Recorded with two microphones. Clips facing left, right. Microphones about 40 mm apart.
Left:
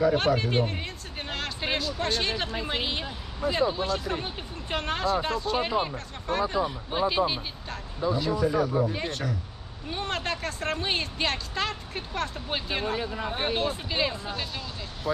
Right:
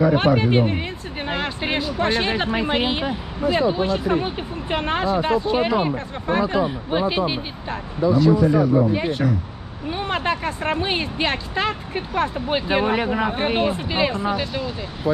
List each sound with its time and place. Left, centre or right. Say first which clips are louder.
0.0 s speech: right 6 dB; right
8.0 s speech: right 10 dB; centre
8.3 s speech: right 7 dB; centre
12.8 s speech: right 10 dB; right
13.5 s speech: right 5 dB; right
13.7 s speech: right 7 dB; right